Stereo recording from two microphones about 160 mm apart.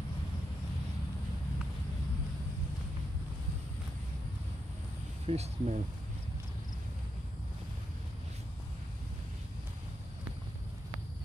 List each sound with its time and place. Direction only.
5.2 s speech: 40° right (ahead or behind)